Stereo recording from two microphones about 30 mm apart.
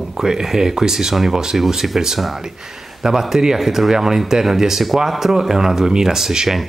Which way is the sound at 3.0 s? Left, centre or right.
Centre.